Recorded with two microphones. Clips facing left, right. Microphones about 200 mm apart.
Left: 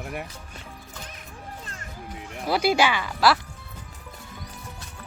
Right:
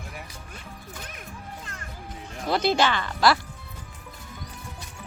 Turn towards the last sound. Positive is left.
turn(degrees=0)  # may be behind; listen again after turning